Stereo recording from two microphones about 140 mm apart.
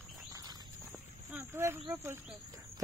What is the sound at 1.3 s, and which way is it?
Speech, 15° right (ahead or behind).